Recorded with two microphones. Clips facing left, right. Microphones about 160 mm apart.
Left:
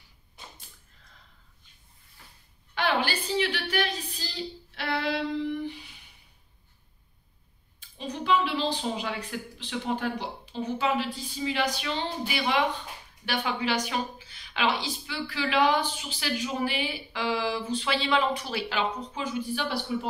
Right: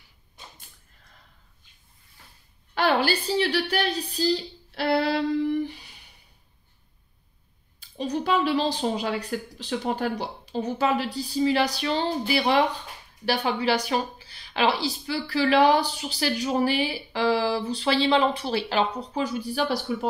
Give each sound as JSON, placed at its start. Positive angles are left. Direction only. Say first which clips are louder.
{"t": 2.7, "sound": "a sound", "louder": "right 5 dB", "side_deg": -35}
{"t": 3.7, "sound": "speech", "louder": "right 3 dB", "side_deg": -35}
{"t": 8.0, "sound": "speech", "louder": "right 3 dB", "side_deg": -40}